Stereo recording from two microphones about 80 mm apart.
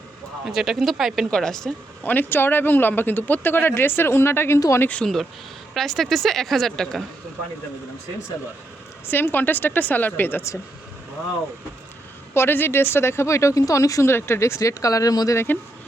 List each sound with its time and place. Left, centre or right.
0.4 s speech: centre
2.0 s speech: left
4.8 s speech: centre
5.7 s speech: centre
9.0 s speech: left
12.3 s speech: left
14.1 s speech: left